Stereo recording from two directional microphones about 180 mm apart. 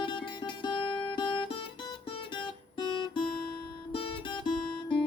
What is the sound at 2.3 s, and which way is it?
Guitar, 25° left (ahead or behind).